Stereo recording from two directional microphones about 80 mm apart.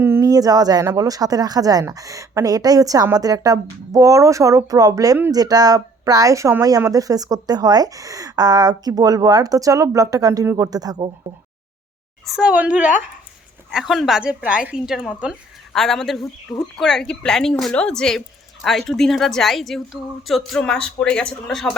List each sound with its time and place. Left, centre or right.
0.0 s a sound: right
0.3 s speech: right
12.4 s a woman's voice: centre
13.7 s a woman's voice: centre
14.2 s a woman's voice: centre
15.7 s a woman's voice: centre
20.6 s speech: centre